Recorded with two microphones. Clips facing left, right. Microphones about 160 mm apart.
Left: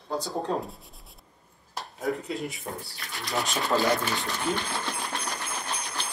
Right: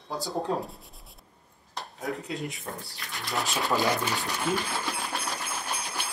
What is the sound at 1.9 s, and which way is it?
Speech, centre (ahead or behind).